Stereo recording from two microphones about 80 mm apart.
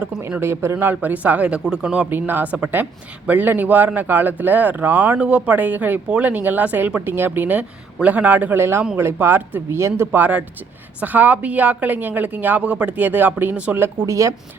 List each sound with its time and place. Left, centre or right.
0.2 s speech: right; by 2.0 s centre
2.0 s speech: right
10.1 s speech: centre
14.1 s speech: right